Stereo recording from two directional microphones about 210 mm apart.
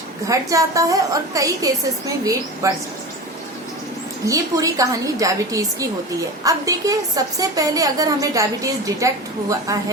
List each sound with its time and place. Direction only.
0.3 s a woman's voice: 15° right (ahead or behind)
4.3 s a woman's voice: 15° right (ahead or behind)